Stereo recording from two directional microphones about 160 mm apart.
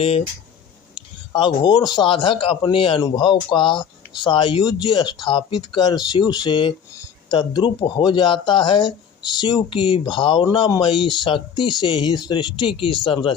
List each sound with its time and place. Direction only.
0.9 s speech: 30° left (ahead or behind)